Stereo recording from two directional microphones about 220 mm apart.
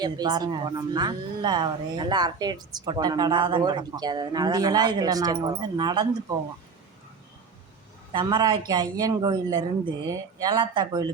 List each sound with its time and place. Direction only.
0.0 s a woman's voice: 20° right (ahead or behind)
8.1 s a woman's voice: 20° right (ahead or behind)